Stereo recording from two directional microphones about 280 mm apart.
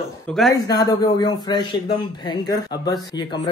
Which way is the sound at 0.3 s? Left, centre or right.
Centre.